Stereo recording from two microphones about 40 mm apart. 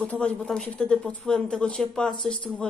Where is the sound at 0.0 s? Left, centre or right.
Left.